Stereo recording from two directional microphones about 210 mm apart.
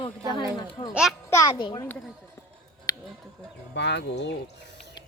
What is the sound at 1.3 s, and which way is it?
Speech, 20° left (ahead or behind).